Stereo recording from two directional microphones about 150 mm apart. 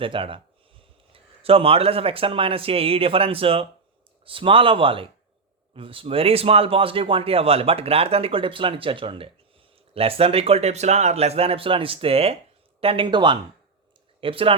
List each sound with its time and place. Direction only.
0.0 s speech: 35° right (ahead or behind)